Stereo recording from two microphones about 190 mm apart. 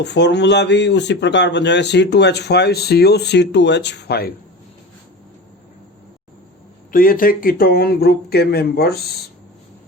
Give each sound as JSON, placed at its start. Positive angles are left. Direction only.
{"t": 0.0, "sound": "speech", "side_deg": 65}
{"t": 6.9, "sound": "speech", "side_deg": 50}